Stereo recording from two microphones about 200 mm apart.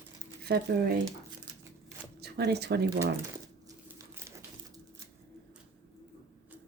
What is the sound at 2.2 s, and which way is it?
Speech, 55° right (ahead or behind).